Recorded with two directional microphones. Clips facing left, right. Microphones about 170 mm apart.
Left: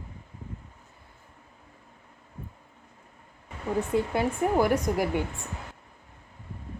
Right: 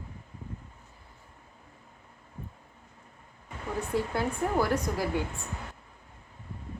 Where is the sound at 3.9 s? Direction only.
15° left (ahead or behind).